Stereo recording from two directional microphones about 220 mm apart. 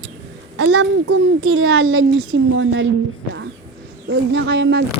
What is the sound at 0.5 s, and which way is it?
A child's voice, 75° right (ahead or behind).